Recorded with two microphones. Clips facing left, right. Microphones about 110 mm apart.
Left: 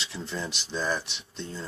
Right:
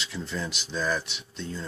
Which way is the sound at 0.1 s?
20° left (ahead or behind).